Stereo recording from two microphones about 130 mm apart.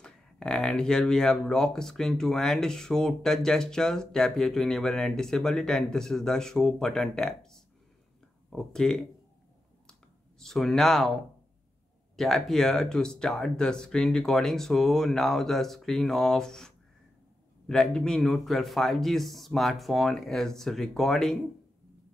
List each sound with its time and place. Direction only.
0.0 s speech: 5° left (ahead or behind)
10.4 s speech: 5° left (ahead or behind)
12.2 s speech: centre (ahead or behind)